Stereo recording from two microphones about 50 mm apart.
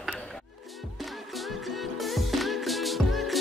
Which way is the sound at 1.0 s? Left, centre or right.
Centre.